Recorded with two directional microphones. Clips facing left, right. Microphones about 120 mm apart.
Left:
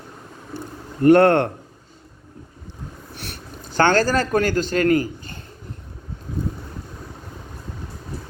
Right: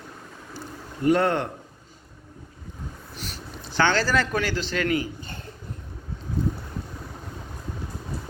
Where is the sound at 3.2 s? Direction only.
60° left (ahead or behind); by 5.0 s 45° left (ahead or behind).